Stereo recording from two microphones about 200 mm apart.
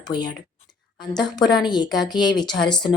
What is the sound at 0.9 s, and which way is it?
A woman's voice, 20° left (ahead or behind).